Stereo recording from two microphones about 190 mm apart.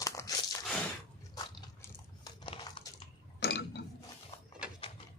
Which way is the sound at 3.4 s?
65° left (ahead or behind).